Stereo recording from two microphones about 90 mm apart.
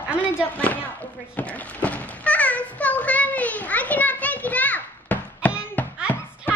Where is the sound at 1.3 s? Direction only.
15° left (ahead or behind).